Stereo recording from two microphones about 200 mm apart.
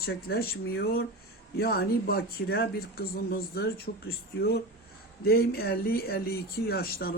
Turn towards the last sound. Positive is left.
turn(degrees=50)  # may be behind; listen again after turning